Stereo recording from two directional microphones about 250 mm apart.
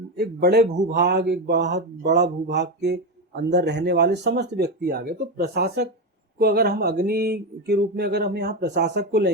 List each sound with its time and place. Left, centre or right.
0.2 s speech: right